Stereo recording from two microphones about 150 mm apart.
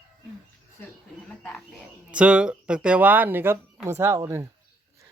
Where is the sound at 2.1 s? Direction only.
5° right (ahead or behind).